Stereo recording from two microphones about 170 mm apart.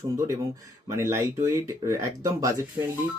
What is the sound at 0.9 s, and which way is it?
Speech, 15° right (ahead or behind).